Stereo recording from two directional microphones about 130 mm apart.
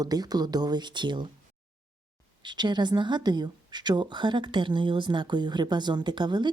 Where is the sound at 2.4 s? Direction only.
35° right (ahead or behind).